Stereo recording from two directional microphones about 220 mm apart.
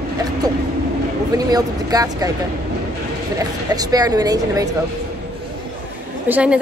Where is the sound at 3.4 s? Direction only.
15° right (ahead or behind).